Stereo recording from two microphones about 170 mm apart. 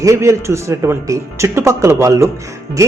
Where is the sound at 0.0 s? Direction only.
20° right (ahead or behind).